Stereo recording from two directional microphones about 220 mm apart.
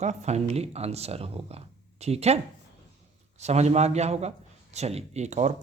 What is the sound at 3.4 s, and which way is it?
Speech, 30° right (ahead or behind).